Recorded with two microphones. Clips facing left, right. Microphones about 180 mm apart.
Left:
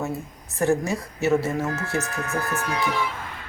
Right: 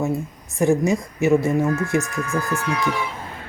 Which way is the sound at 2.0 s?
70° left (ahead or behind).